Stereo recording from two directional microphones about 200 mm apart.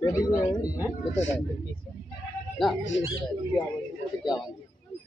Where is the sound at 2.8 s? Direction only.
70° left (ahead or behind).